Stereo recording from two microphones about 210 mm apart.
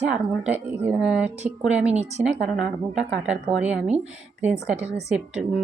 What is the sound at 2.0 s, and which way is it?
Speech, 30° right (ahead or behind).